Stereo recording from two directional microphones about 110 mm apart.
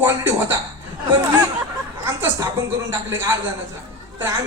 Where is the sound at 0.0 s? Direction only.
20° right (ahead or behind).